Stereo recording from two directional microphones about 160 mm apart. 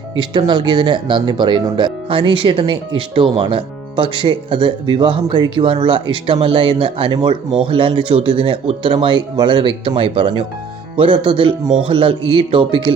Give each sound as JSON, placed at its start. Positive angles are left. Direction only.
{"t": 0.2, "sound": "speech", "side_deg": -30}